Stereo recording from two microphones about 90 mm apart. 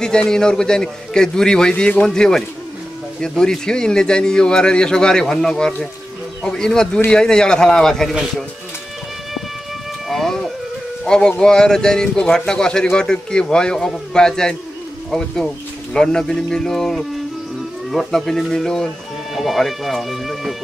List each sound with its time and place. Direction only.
0.0 s speech: 10° left (ahead or behind)
10.0 s a sound: 5° left (ahead or behind)
11.1 s speech: 10° left (ahead or behind)